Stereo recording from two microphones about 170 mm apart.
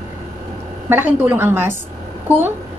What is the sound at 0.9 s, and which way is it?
Speech, 15° right (ahead or behind).